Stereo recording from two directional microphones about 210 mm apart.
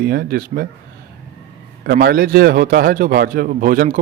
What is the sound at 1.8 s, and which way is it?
A man's voice, 50° right (ahead or behind).